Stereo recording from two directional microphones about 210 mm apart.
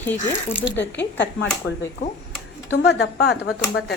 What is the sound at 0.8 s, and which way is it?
Speech, 55° left (ahead or behind).